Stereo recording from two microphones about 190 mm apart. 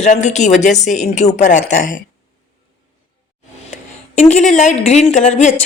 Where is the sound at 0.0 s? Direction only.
40° left (ahead or behind).